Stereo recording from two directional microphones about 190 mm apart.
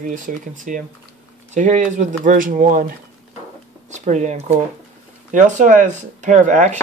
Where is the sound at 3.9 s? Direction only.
40° right (ahead or behind).